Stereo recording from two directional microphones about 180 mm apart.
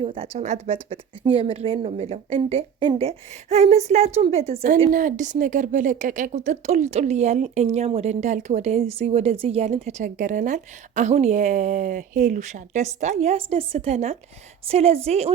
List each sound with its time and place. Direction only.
0.0 s a woman's voice: 30° right (ahead or behind)
4.9 s a woman's voice: 45° right (ahead or behind)